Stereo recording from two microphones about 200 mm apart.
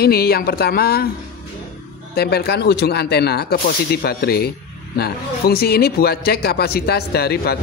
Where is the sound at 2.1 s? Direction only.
50° left (ahead or behind).